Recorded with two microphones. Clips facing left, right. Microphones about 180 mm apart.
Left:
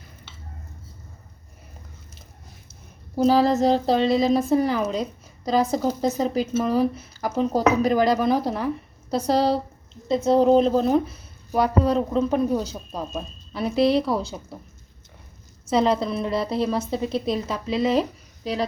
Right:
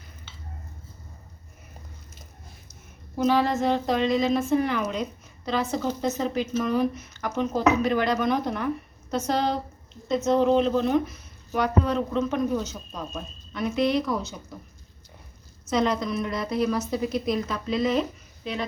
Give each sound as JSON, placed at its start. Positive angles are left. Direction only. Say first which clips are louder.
{"t": 3.2, "sound": "speech", "louder": "left 4 dB", "side_deg": 35}
{"t": 15.6, "sound": "a woman's voice", "louder": "left 4 dB", "side_deg": 30}